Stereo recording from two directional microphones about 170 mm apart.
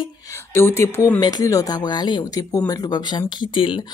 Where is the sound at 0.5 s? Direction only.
15° left (ahead or behind).